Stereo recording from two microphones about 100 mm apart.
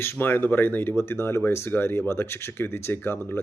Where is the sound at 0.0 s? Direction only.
20° left (ahead or behind).